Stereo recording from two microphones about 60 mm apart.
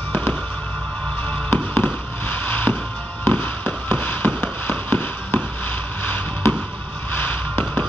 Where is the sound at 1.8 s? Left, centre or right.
Left.